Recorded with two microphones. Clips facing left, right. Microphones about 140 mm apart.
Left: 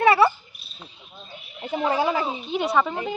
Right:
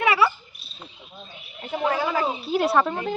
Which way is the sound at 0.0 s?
35° left (ahead or behind).